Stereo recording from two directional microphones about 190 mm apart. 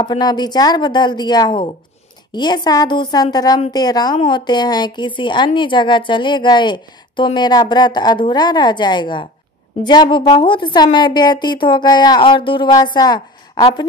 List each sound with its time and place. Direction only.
0.0 s a woman's voice: 20° left (ahead or behind)